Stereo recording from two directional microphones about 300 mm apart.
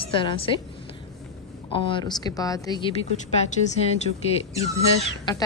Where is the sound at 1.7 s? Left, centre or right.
Centre.